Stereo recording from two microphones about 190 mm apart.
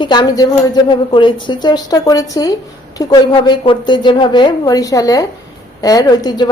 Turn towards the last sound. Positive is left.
turn(degrees=20)  # may be behind; listen again after turning